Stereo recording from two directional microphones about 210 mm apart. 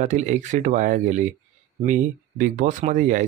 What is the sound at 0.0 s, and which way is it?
Speech, 35° right (ahead or behind).